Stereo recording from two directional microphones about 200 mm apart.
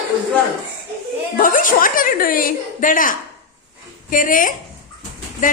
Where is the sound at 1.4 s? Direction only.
45° left (ahead or behind).